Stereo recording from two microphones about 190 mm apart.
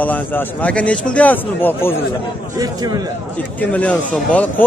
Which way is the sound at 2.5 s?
20° right (ahead or behind).